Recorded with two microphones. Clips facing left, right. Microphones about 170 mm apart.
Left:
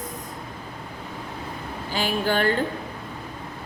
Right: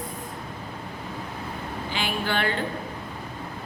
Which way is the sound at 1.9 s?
40° left (ahead or behind).